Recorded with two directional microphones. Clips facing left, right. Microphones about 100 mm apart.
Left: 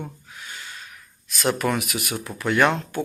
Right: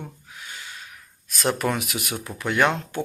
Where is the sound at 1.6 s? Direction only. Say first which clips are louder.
Left 1 dB; 20° right (ahead or behind).